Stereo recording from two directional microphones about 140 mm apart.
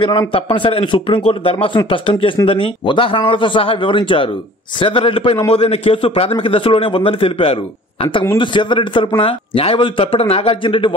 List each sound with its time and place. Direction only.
0.3 s a man's voice: 40° left (ahead or behind)